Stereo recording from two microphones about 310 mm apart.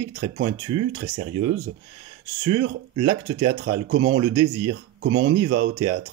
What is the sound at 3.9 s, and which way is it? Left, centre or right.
Speech, right.